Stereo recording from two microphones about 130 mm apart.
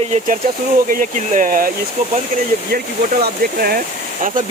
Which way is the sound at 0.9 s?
90° right.